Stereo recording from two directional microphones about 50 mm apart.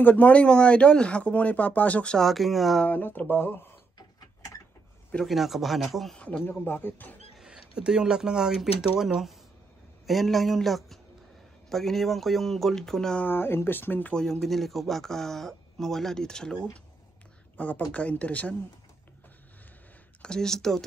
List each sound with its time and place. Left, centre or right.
0.0 s speech: left
2.1 s speech: centre
2.9 s speech: left
5.2 s speech: centre
6.1 s speech: left
6.6 s speech: left
7.3 s speech: centre
13.2 s speech: left
14.1 s speech: centre
17.6 s speech: left
20.2 s speech: centre